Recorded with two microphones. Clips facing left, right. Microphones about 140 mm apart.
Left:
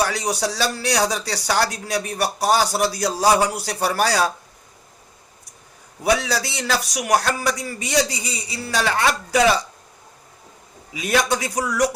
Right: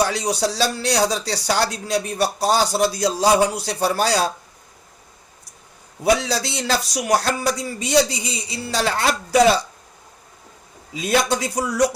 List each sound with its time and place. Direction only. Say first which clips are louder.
0.0 s speech: right 2 dB; 25° right (ahead or behind)
6.1 s speech: right 1 dB; 25° right (ahead or behind)
10.9 s speech: right 1 dB; 30° right (ahead or behind)